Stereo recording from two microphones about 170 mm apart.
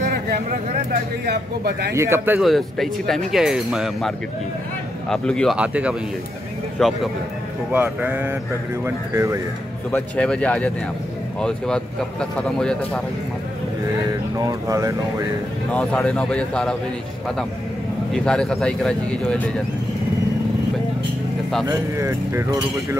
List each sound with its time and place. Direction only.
0.0 s a sound: 55° right (ahead or behind)
1.2 s speech: 70° right (ahead or behind)
2.0 s speech: 15° right (ahead or behind)
2.4 s speech: centre (ahead or behind)
5.1 s speech: 5° left (ahead or behind)
5.6 s speech: 5° right (ahead or behind)
7.7 s speech: 10° right (ahead or behind)
9.8 s speech: 5° left (ahead or behind)
14.3 s speech: 20° right (ahead or behind)
15.7 s speech: 5° left (ahead or behind)
18.1 s speech: 5° left (ahead or behind)
21.6 s speech: 15° right (ahead or behind)